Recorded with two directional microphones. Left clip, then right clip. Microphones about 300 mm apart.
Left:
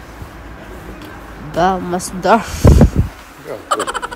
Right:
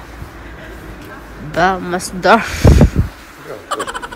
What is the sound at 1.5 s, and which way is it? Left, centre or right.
Speech, centre.